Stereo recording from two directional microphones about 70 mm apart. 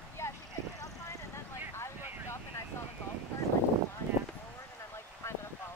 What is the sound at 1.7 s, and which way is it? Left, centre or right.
Vehicle, left.